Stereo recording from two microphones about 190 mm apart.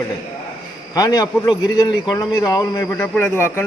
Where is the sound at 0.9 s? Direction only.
20° left (ahead or behind).